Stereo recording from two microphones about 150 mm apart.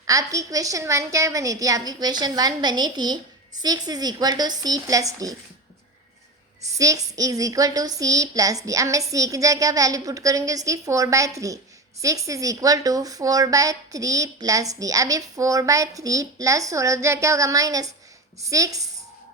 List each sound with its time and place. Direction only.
0.1 s speech: 20° right (ahead or behind)
6.7 s speech: 25° right (ahead or behind)